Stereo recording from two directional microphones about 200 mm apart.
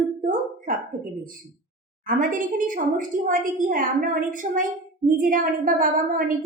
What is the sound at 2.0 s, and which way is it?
A child's voice, 45° right (ahead or behind).